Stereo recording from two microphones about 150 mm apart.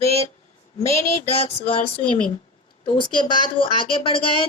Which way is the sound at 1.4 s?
40° left (ahead or behind).